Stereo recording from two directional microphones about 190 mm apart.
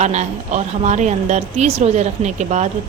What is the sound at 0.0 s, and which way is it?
A woman's voice, 40° right (ahead or behind).